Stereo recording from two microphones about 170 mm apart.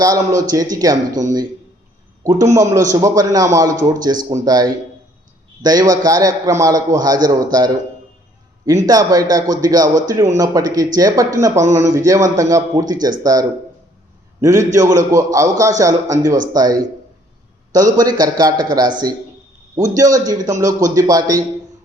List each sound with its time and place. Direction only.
0.0 s a man's voice: 20° right (ahead or behind)
2.2 s a man's voice: 20° right (ahead or behind)
14.4 s a man's voice: 20° right (ahead or behind)